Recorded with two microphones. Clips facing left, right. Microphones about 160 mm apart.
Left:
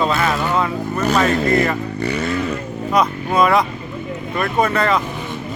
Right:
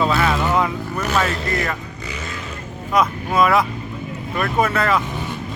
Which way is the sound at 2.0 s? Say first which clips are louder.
Left 11 dB; 65° left (ahead or behind).